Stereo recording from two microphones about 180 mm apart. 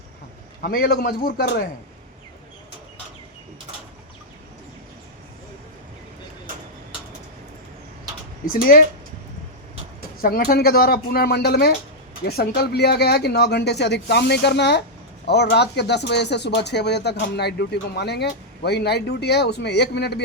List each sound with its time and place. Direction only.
0.6 s speech: 60° left (ahead or behind)
10.2 s speech: 55° left (ahead or behind)